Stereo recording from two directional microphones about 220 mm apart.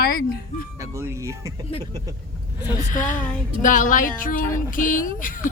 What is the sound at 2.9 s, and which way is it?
Speech, 35° left (ahead or behind).